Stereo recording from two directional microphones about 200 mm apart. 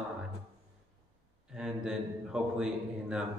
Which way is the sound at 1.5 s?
5° right (ahead or behind).